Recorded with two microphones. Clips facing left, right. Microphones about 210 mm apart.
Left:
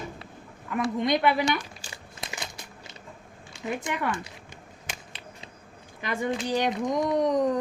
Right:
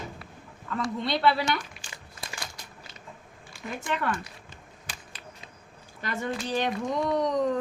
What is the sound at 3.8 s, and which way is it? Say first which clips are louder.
Speech: right 4 dB; 15° left (ahead or behind).